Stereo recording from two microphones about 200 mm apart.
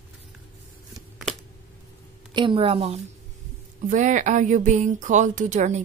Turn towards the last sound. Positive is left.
turn(degrees=-35)  # may be behind; listen again after turning